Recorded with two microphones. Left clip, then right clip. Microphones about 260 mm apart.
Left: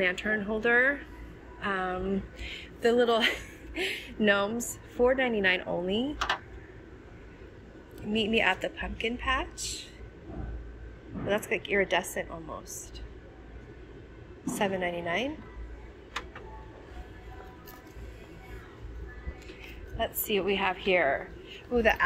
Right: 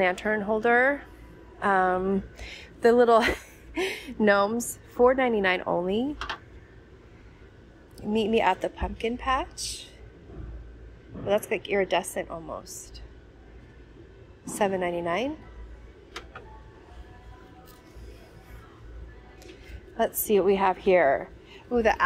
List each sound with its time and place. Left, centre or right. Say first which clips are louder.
0.0 s speech: right 3 dB; centre
8.1 s speech: right 3 dB; centre
11.2 s speech: right 4 dB; centre
14.6 s speech: right 4 dB; centre
20.0 s a woman's voice: right 6 dB; centre